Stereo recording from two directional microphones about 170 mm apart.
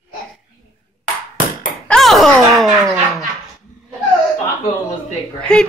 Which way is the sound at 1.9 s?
Centre (ahead or behind).